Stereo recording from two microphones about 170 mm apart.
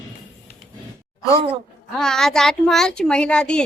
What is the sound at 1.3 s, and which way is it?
Speech, 35° right (ahead or behind).